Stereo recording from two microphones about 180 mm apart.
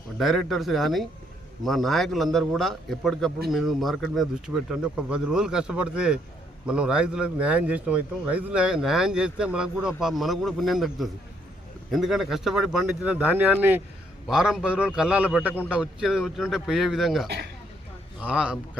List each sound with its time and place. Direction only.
0.2 s a man's voice: centre (ahead or behind)
17.2 s speech: 65° right (ahead or behind)
18.2 s a man's voice: 5° right (ahead or behind)